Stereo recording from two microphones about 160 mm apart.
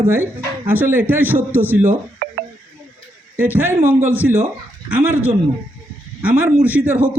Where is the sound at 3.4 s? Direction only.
10° right (ahead or behind).